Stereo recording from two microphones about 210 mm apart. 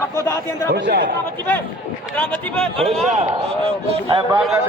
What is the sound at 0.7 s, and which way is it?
Speech, 55° right (ahead or behind).